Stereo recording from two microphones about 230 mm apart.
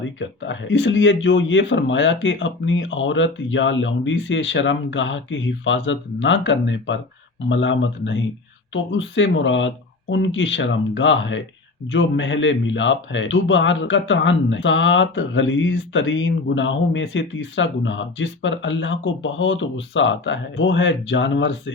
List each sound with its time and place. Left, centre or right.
0.2 s a man's voice: left